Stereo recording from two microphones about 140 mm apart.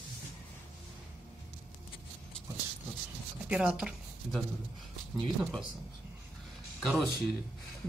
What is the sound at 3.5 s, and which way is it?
Speech, 5° right (ahead or behind).